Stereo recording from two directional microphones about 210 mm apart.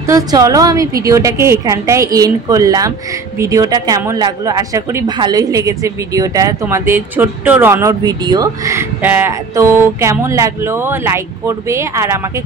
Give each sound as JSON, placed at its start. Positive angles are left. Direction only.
{"t": 0.0, "sound": "speech", "side_deg": -15}